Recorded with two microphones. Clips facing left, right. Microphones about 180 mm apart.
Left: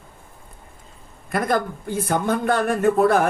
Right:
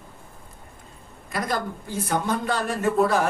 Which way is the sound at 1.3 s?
55° left (ahead or behind).